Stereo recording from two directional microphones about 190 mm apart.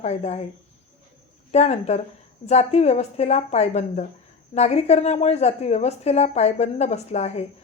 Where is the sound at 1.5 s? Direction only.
35° left (ahead or behind).